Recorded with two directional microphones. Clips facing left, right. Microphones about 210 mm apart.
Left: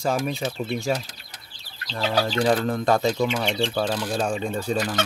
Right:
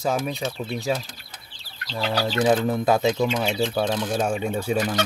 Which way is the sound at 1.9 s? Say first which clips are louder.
Left 1 dB; 5° right (ahead or behind).